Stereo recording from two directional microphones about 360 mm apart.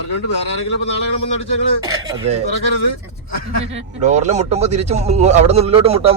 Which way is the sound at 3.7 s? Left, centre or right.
Centre.